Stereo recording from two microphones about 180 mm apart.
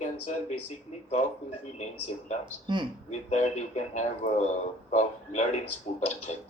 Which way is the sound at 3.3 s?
40° left (ahead or behind).